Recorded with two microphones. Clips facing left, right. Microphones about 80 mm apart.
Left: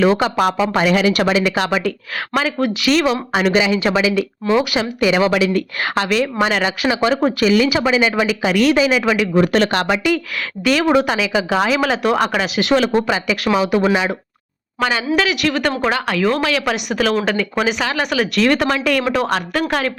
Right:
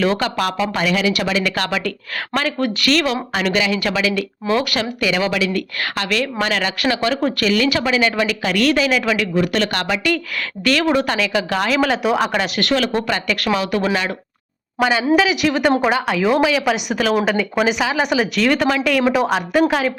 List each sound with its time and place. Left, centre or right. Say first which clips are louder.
0.0 s speech: left 4 dB; centre
0.7 s speech: left 3 dB; left
1.4 s speech: left 3 dB; centre
4.9 s a woman's voice: left 5 dB; left
9.3 s speech: left 4 dB; left
10.6 s speech: left 2 dB; centre
14.8 s speech: right 2 dB; centre